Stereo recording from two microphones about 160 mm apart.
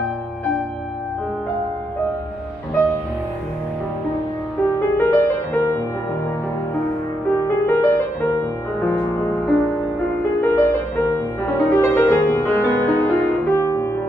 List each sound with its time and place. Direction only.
4.7 s music: 20° left (ahead or behind)
7.3 s music: 15° left (ahead or behind)